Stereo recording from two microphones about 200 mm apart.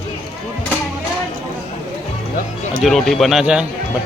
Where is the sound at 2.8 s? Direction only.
Centre (ahead or behind).